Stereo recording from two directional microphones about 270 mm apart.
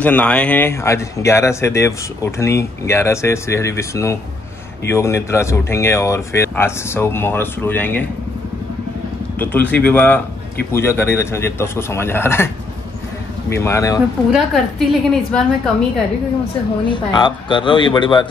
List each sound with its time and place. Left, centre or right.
0.0 s speech: centre
9.4 s a woman's voice: centre
13.5 s speech: centre
14.3 s a woman's voice: centre
16.9 s speech: centre